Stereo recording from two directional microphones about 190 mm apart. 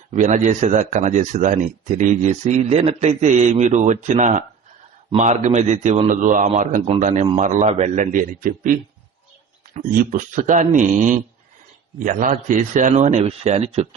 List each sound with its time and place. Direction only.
0.1 s a man's voice: 40° right (ahead or behind)
9.9 s speech: 50° right (ahead or behind)